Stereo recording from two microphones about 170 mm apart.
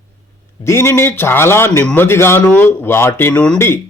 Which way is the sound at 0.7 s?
15° left (ahead or behind).